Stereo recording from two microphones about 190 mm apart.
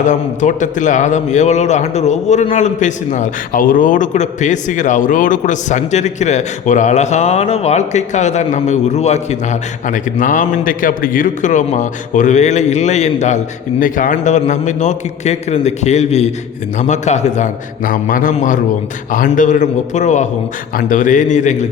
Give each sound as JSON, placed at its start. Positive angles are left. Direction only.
{"t": 0.0, "sound": "a man's voice", "side_deg": 40}